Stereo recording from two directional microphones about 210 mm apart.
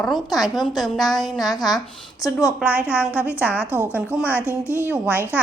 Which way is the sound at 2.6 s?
5° right (ahead or behind).